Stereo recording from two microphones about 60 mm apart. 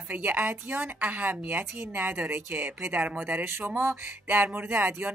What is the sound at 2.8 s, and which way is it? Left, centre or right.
Speech, right.